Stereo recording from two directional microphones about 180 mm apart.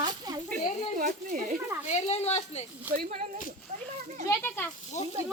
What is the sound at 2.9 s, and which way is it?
Speech, 50° right (ahead or behind).